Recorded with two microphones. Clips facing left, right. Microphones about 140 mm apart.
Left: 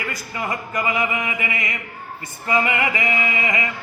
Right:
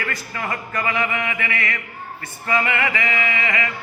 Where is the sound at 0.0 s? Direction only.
10° left (ahead or behind).